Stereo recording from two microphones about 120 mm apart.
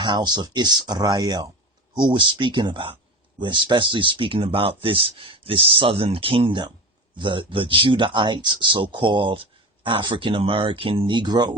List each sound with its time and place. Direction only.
0.0 s speech: 40° right (ahead or behind)